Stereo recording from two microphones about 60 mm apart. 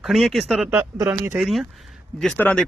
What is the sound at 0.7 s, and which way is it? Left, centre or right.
Speech, right.